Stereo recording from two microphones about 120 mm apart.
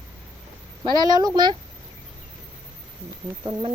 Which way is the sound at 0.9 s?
35° right (ahead or behind).